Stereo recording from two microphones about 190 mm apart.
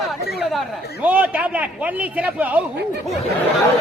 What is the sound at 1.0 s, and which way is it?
A man's voice, 5° right (ahead or behind).